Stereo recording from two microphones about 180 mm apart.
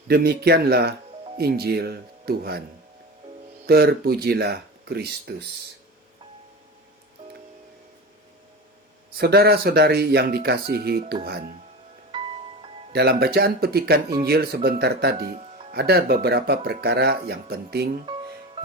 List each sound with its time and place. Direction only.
0.1 s speech: 60° right (ahead or behind)
3.7 s speech: 60° right (ahead or behind)
9.1 s speech: 60° right (ahead or behind)
12.1 s glockenspiel: 30° right (ahead or behind)
12.9 s speech: 60° right (ahead or behind)
18.0 s music: 25° right (ahead or behind)